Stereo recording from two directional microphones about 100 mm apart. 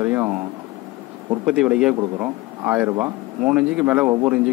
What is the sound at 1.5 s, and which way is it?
Speech, 10° right (ahead or behind).